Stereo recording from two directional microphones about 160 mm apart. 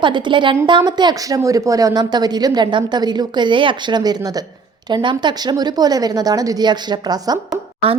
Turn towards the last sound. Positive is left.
turn(degrees=-35)  # may be behind; listen again after turning